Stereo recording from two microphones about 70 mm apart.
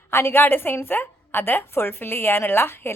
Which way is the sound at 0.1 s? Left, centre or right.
Left.